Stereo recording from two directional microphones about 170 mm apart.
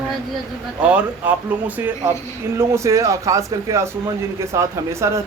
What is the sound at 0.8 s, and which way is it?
A man's voice, 5° right (ahead or behind).